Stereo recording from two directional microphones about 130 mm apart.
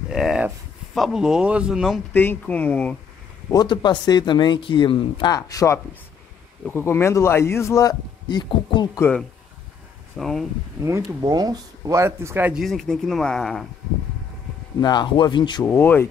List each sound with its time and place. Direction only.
0.1 s a sound: 5° right (ahead or behind)
0.9 s speech: centre (ahead or behind)
2.1 s speech: 15° left (ahead or behind)
3.4 s speech: 35° left (ahead or behind)
5.3 s speech: 25° left (ahead or behind)
10.1 s speech: centre (ahead or behind)
10.8 s speech: 20° right (ahead or behind)
12.6 s speech: centre (ahead or behind)
14.8 s speech: 35° left (ahead or behind)
15.6 s speech: 15° left (ahead or behind)